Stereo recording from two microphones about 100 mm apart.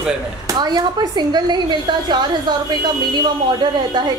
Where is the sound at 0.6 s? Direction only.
45° right (ahead or behind).